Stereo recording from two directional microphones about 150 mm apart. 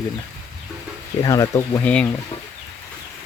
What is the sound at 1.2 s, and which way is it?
Speech, 25° left (ahead or behind).